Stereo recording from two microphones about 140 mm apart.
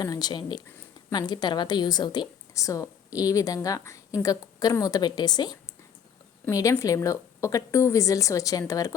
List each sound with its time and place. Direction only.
0.0 s a woman's voice: 30° left (ahead or behind)